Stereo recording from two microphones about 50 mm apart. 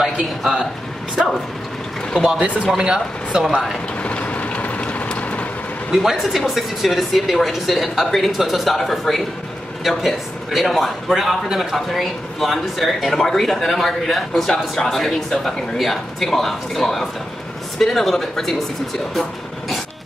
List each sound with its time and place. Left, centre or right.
0.0 s a sound: centre
1.2 s speech: centre
2.8 s speech: centre
4.0 s vehicle: left
5.9 s a man's voice: centre